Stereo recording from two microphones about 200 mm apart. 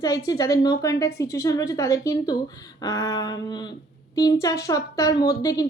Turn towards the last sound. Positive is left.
turn(degrees=15)  # may be behind; listen again after turning